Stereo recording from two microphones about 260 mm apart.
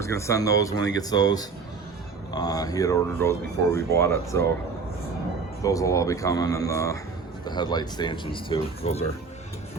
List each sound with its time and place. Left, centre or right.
0.0 s speech: centre
5.6 s speech: centre